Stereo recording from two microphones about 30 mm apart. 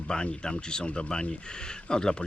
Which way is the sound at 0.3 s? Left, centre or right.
Left.